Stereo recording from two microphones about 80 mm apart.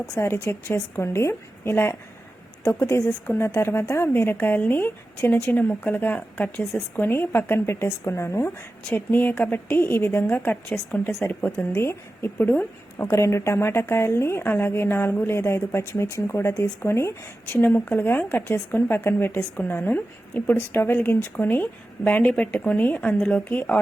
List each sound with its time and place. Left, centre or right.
0.4 s a woman's voice: left; by 11.8 s centre
11.8 s a woman's voice: left
13.1 s a woman's voice: left
17.5 s speech: left